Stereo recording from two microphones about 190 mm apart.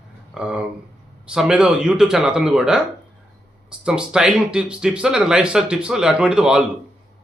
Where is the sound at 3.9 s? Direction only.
5° right (ahead or behind).